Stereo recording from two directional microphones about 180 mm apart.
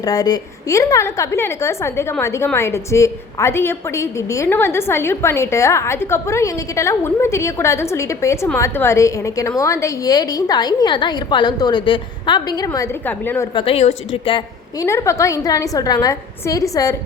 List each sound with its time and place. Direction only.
0.0 s a woman's voice: 20° left (ahead or behind)
13.5 s a woman's voice: 30° left (ahead or behind)
14.8 s a woman's voice: 15° left (ahead or behind)